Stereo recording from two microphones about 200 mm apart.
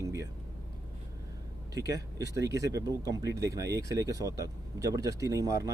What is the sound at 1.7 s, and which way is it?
Speech, 15° right (ahead or behind).